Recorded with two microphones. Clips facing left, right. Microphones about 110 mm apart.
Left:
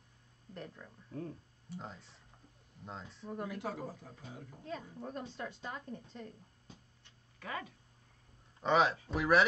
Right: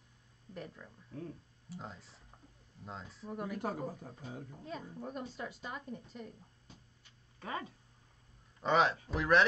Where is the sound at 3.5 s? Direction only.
45° right (ahead or behind).